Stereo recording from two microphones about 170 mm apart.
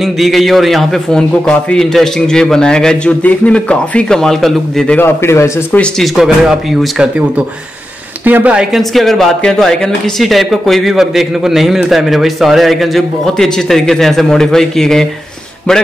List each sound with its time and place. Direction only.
0.0 s a man's voice: centre (ahead or behind)
8.3 s a man's voice: 10° right (ahead or behind)